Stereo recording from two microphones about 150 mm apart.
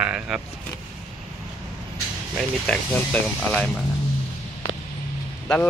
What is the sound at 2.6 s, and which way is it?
Speech, 10° left (ahead or behind).